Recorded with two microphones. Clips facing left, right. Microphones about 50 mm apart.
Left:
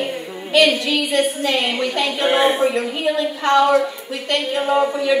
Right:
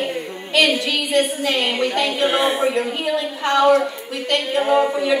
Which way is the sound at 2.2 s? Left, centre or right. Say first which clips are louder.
Left 3 dB; left.